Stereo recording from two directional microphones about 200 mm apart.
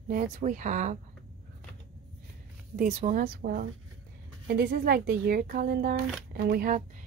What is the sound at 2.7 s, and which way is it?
A woman's voice, 40° right (ahead or behind).